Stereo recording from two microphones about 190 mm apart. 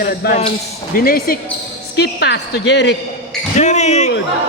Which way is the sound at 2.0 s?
65° left (ahead or behind).